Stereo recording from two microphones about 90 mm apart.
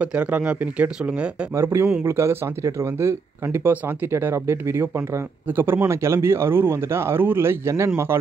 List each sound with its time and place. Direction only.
0.0 s speech: 15° right (ahead or behind)
1.5 s speech: 30° right (ahead or behind)